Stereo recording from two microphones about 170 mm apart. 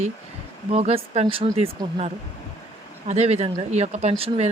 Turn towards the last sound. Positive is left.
turn(degrees=-40)  # may be behind; listen again after turning